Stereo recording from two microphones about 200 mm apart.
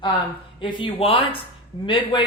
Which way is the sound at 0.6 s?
25° left (ahead or behind).